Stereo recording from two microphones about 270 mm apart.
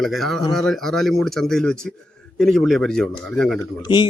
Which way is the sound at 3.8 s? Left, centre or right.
Centre.